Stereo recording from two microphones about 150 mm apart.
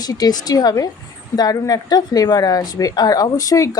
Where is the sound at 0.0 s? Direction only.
25° left (ahead or behind).